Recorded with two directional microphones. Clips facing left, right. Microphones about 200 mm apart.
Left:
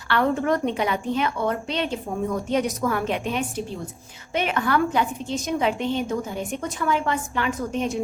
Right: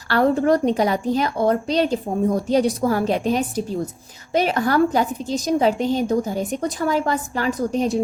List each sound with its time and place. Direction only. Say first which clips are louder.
0.1 s a woman's voice: right 5 dB; 35° right (ahead or behind)